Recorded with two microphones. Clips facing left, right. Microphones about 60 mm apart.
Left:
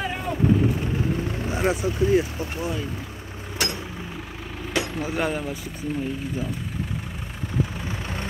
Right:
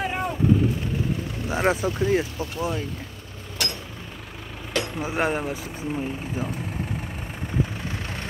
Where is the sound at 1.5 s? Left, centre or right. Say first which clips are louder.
Right 2 dB; right.